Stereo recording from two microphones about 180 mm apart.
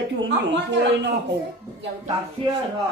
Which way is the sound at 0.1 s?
80° right.